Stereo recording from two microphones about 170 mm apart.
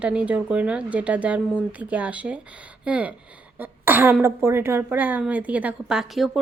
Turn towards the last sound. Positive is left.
turn(degrees=0)  # may be behind; listen again after turning